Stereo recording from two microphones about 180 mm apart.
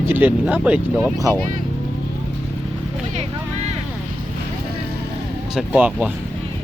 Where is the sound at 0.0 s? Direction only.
10° right (ahead or behind).